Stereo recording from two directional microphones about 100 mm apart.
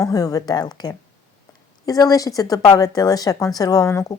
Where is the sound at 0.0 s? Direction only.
40° left (ahead or behind).